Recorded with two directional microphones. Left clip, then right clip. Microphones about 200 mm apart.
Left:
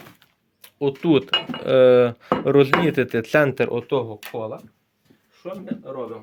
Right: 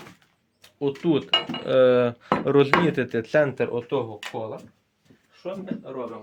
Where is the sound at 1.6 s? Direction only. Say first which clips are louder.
Left 5 dB; 30° left (ahead or behind); by 4.0 s 60° left (ahead or behind).